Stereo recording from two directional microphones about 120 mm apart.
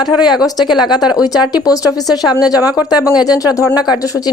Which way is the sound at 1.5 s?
30° left (ahead or behind).